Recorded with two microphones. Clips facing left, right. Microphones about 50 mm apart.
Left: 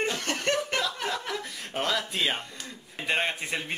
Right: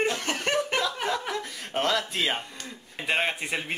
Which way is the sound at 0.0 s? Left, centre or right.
Centre.